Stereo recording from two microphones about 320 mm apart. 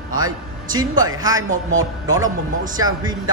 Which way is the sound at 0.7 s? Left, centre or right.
Centre.